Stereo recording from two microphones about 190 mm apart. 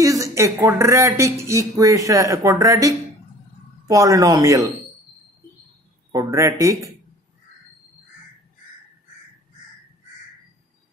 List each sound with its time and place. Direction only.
0.0 s speech: 15° right (ahead or behind)
6.1 s speech: 15° right (ahead or behind)